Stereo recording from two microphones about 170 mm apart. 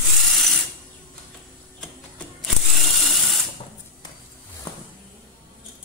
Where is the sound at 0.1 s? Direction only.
Centre (ahead or behind).